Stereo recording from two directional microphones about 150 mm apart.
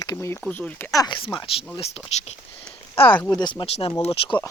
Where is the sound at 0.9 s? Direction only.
25° left (ahead or behind).